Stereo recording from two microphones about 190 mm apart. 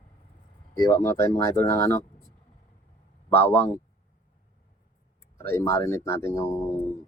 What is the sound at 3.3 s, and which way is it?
Speech, 10° left (ahead or behind).